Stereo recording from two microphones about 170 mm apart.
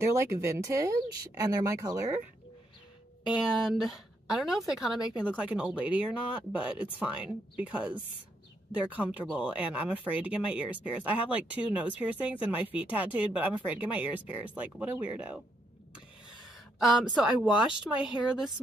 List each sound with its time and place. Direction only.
0.0 s speech: 15° right (ahead or behind)
3.3 s a woman's voice: 5° right (ahead or behind)
16.3 s a sound: centre (ahead or behind)
17.9 s speech: 10° left (ahead or behind)